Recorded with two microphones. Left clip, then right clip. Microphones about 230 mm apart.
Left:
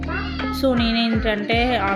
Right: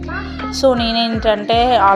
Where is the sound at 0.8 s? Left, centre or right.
Right.